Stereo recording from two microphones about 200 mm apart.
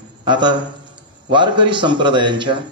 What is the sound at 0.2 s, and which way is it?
A man's voice, 25° right (ahead or behind).